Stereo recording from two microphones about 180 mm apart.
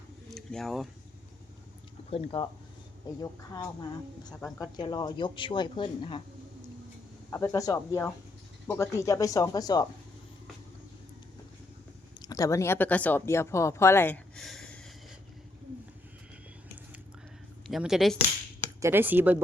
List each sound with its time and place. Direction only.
0.3 s speech: centre (ahead or behind)
2.0 s speech: 35° left (ahead or behind)
3.2 s speech: 20° left (ahead or behind)
4.4 s speech: 10° left (ahead or behind)
4.6 s speech: 25° left (ahead or behind)
7.3 s speech: 15° left (ahead or behind)
12.2 s speech: 20° left (ahead or behind)
17.7 s speech: centre (ahead or behind)
18.8 s speech: 10° right (ahead or behind)